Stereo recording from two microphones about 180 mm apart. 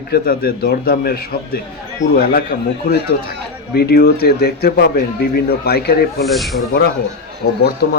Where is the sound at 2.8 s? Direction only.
60° left (ahead or behind).